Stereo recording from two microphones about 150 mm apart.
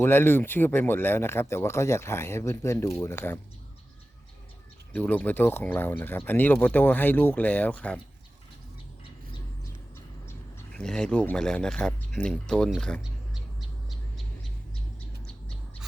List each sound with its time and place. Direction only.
0.0 s speech: 15° left (ahead or behind)
4.9 s speech: 10° left (ahead or behind)
10.7 s speech: 5° left (ahead or behind)